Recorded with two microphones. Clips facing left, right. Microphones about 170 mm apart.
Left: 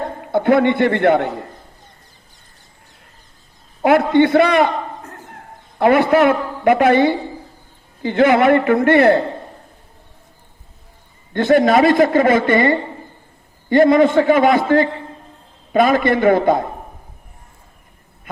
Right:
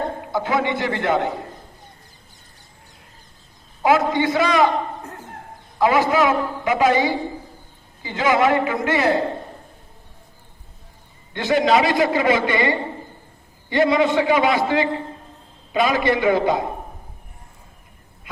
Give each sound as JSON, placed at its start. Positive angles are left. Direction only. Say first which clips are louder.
{"t": 0.3, "sound": "a man's voice", "louder": "left 9 dB", "side_deg": 60}
{"t": 3.8, "sound": "a man's voice", "louder": "left 5 dB", "side_deg": 60}
{"t": 5.8, "sound": "a man's voice", "louder": "left 5 dB", "side_deg": 60}
{"t": 11.3, "sound": "a man's voice", "louder": "left 5 dB", "side_deg": 50}